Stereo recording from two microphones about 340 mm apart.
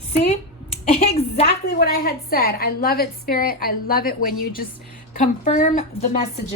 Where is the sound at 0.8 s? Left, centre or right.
Centre.